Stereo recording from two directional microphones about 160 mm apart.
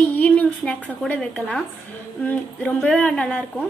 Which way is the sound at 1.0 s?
10° left (ahead or behind).